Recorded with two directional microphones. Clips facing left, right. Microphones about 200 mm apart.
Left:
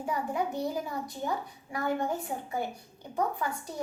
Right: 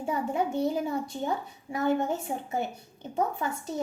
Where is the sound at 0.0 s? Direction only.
25° right (ahead or behind).